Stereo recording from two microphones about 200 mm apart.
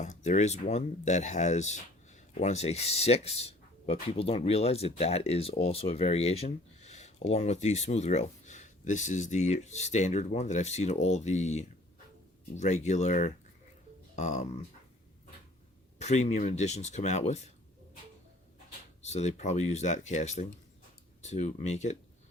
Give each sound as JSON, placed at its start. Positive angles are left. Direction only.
{"t": 0.0, "sound": "speech", "side_deg": 35}
{"t": 16.0, "sound": "speech", "side_deg": 35}
{"t": 19.0, "sound": "speech", "side_deg": 35}